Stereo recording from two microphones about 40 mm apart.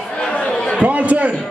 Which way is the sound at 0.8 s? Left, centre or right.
Right.